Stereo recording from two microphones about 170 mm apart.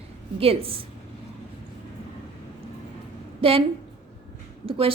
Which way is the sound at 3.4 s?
35° right (ahead or behind).